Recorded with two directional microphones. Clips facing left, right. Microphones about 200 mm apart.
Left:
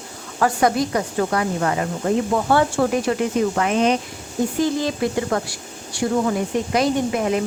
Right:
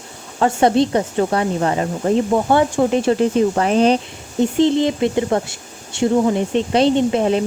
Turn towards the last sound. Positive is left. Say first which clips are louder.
# right 4 dB
turn(degrees=-30)  # may be behind; listen again after turning